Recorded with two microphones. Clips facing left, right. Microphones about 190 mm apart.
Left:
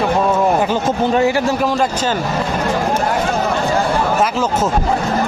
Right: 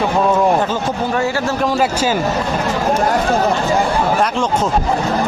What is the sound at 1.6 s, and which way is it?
Speech, centre (ahead or behind).